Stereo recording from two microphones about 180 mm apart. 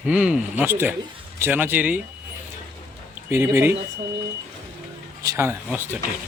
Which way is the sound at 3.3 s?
10° right (ahead or behind).